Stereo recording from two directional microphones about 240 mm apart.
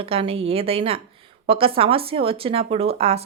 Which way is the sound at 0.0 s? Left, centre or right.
Right.